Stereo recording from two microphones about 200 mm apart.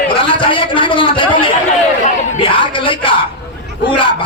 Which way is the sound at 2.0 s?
35° left (ahead or behind).